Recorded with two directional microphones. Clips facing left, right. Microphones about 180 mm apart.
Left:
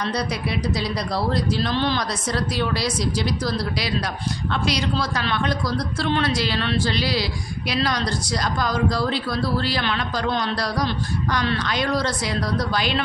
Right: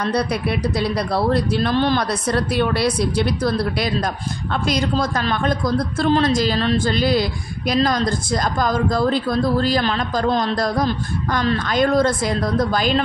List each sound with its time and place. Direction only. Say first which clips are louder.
0.0 s a woman's voice: right 5 dB; 55° right (ahead or behind)